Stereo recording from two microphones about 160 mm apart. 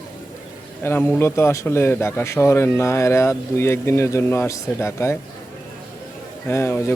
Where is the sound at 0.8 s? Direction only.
15° left (ahead or behind).